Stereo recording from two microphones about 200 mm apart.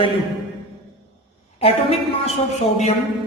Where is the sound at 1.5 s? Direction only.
30° left (ahead or behind).